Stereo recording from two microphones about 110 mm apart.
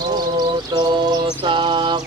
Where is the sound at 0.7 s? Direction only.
40° right (ahead or behind).